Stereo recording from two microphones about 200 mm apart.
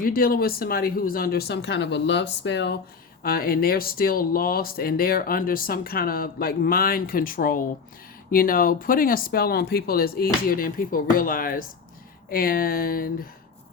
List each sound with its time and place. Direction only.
0.0 s speech: 45° left (ahead or behind)
3.2 s speech: 50° left (ahead or behind)